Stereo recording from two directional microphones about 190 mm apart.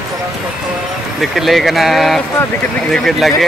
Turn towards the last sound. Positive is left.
turn(degrees=0)  # may be behind; listen again after turning